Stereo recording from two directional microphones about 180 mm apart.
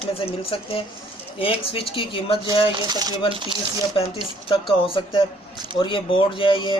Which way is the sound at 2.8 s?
20° right (ahead or behind).